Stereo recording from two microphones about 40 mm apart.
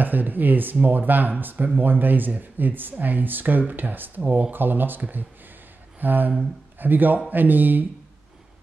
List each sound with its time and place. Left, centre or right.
0.0 s speech: right
5.9 s a sound: right
6.8 s speech: right